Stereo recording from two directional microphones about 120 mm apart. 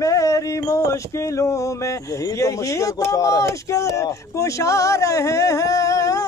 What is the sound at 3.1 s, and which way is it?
Speech, 30° left (ahead or behind).